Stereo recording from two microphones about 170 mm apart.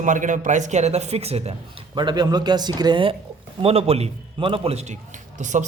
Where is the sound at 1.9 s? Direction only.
25° right (ahead or behind).